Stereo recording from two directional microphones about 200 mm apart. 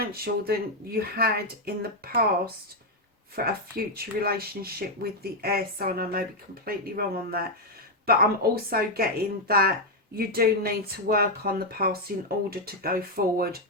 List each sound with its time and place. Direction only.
0.0 s speech: 50° right (ahead or behind)
3.3 s speech: 50° right (ahead or behind)